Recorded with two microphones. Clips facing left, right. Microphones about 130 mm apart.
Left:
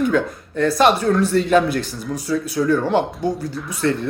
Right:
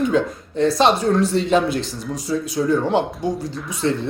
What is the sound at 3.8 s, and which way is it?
Speech, 20° right (ahead or behind).